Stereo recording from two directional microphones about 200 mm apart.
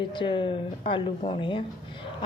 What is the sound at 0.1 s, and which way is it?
A woman's voice, 25° left (ahead or behind).